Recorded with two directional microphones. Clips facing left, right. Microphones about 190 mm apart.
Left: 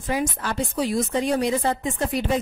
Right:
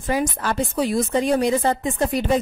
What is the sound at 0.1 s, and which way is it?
A woman's voice, 45° right (ahead or behind).